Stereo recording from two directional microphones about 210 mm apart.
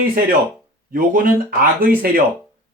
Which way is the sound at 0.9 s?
45° right (ahead or behind).